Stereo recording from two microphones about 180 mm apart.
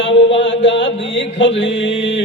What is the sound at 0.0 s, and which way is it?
Mantra, 90° left.